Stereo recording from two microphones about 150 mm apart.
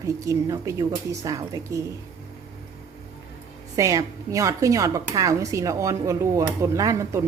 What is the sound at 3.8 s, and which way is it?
Speech, 20° right (ahead or behind).